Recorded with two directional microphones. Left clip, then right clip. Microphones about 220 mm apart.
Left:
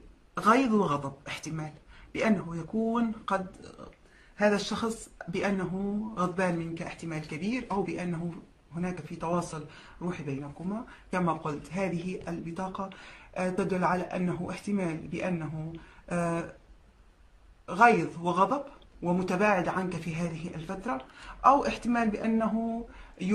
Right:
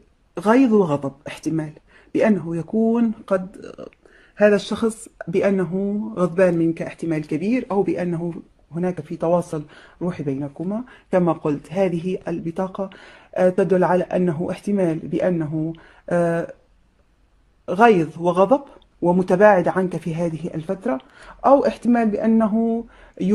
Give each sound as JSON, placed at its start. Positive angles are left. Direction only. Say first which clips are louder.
{"t": 0.3, "sound": "speech", "louder": "right 7 dB", "side_deg": -35}
{"t": 4.4, "sound": "speech", "louder": "right 10 dB", "side_deg": -40}
{"t": 17.6, "sound": "speech", "louder": "right 7 dB", "side_deg": -40}